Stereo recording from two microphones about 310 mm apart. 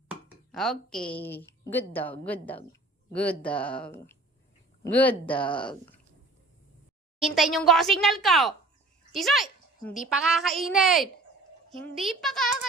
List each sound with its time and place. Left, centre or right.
0.1 s chopping: centre
1.1 s a woman's voice: centre
5.3 s a woman's voice: centre
7.2 s speech: centre
9.1 s a sound: centre
10.1 s speech: centre